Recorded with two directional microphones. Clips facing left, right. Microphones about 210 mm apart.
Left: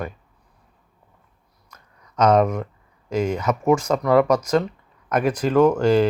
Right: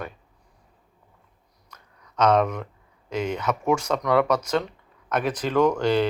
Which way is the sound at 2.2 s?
10° left (ahead or behind).